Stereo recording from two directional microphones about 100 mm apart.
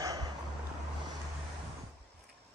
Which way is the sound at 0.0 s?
35° right (ahead or behind).